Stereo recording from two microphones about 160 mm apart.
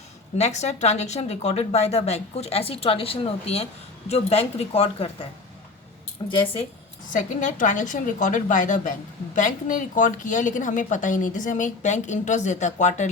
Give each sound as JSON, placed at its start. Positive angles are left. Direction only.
{"t": 0.3, "sound": "a woman's voice", "side_deg": 45}
{"t": 7.1, "sound": "a woman's voice", "side_deg": 55}